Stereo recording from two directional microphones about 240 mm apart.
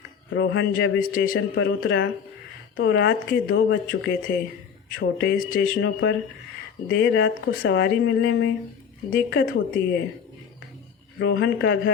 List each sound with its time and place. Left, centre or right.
0.3 s a man's voice: left
1.5 s a man's voice: left
11.2 s speech: left